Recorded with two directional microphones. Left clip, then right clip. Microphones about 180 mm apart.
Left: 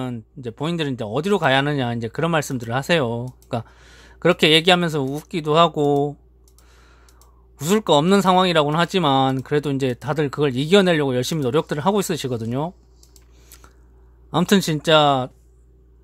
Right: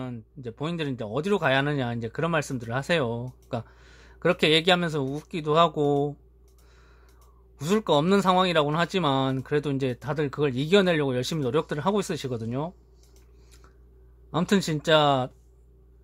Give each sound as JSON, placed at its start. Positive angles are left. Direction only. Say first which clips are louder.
{"t": 0.0, "sound": "speech", "louder": "left 7 dB", "side_deg": 20}
{"t": 7.5, "sound": "speech", "louder": "left 6 dB", "side_deg": 20}
{"t": 14.3, "sound": "speech", "louder": "left 6 dB", "side_deg": 20}